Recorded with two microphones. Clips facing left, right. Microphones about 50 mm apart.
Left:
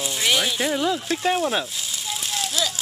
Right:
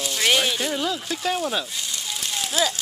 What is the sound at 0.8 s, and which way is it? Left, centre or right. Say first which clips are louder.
Speech: left 3 dB; centre.